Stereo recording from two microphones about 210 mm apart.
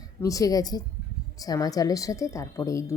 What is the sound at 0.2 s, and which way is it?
A woman's voice, 15° left (ahead or behind).